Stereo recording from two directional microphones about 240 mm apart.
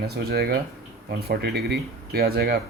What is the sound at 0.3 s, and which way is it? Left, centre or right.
Speech, right.